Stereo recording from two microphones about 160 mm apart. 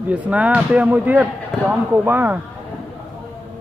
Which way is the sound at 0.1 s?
10° right (ahead or behind).